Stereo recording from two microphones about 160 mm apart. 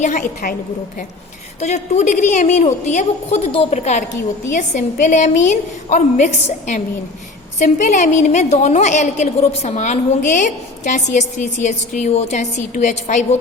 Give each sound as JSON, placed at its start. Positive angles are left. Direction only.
{"t": 0.0, "sound": "a woman's voice", "side_deg": 55}
{"t": 1.5, "sound": "a woman's voice", "side_deg": 45}